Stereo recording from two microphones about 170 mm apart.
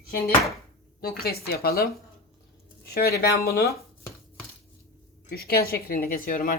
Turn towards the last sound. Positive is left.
turn(degrees=55)  # may be behind; listen again after turning